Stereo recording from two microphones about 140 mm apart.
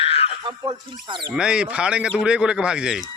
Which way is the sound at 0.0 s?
45° left (ahead or behind).